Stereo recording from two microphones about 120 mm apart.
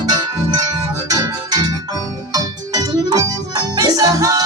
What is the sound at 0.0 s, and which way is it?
Music, 30° right (ahead or behind).